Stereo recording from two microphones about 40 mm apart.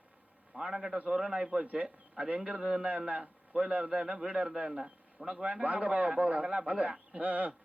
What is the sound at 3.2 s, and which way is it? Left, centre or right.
Speech, centre.